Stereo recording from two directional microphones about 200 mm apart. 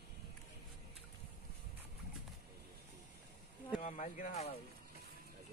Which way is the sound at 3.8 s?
40° left (ahead or behind).